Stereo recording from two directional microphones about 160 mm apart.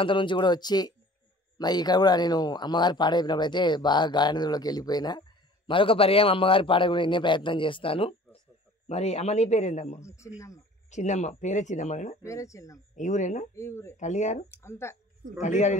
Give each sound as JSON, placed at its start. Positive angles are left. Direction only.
{"t": 0.0, "sound": "a man's voice", "side_deg": 30}
{"t": 10.0, "sound": "speech", "side_deg": 20}
{"t": 10.9, "sound": "speech", "side_deg": 50}
{"t": 12.2, "sound": "speech", "side_deg": 20}
{"t": 12.9, "sound": "speech", "side_deg": 50}
{"t": 13.6, "sound": "speech", "side_deg": 15}
{"t": 13.9, "sound": "speech", "side_deg": 45}
{"t": 14.5, "sound": "speech", "side_deg": 15}
{"t": 15.4, "sound": "speech", "side_deg": 50}